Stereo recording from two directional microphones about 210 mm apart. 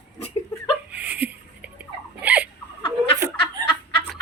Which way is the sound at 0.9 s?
5° right (ahead or behind).